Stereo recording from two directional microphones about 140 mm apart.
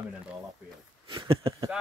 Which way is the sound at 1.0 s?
40° right (ahead or behind).